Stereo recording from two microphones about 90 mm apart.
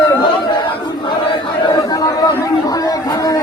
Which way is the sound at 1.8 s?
40° left (ahead or behind).